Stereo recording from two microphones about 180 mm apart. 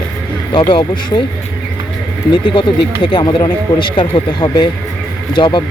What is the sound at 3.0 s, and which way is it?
Speech, 25° left (ahead or behind).